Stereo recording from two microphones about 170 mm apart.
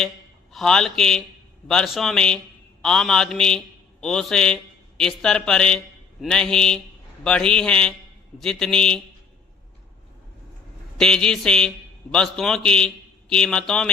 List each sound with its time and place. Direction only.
0.5 s a man's voice: 5° left (ahead or behind)
10.9 s a man's voice: 5° left (ahead or behind)